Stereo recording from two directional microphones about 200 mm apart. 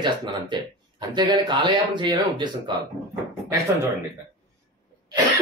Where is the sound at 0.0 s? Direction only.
25° right (ahead or behind).